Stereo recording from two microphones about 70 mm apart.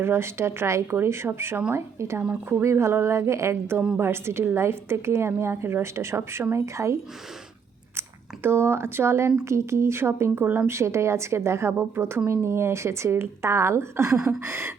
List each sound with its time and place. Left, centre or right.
0.0 s a woman's voice: right
8.4 s a woman's voice: right